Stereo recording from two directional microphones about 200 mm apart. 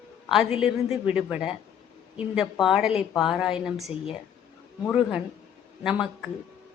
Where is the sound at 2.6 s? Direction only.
Centre (ahead or behind).